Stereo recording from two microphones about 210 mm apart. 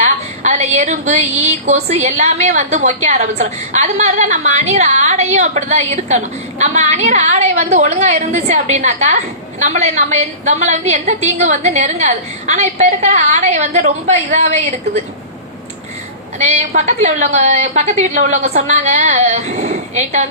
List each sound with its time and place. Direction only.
0.0 s a woman's voice: 35° right (ahead or behind)
16.4 s a woman's voice: 35° right (ahead or behind)